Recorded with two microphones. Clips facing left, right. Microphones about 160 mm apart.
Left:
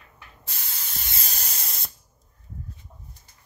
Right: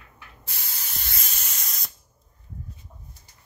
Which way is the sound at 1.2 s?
35° left (ahead or behind).